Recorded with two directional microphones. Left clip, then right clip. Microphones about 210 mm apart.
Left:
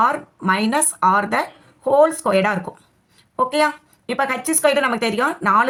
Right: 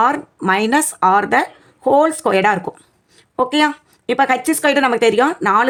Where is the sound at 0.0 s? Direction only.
35° right (ahead or behind).